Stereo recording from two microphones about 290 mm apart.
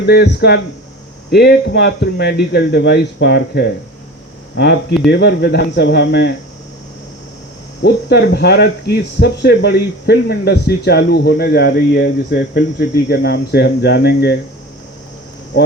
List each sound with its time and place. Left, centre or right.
0.0 s speech: left
7.8 s speech: left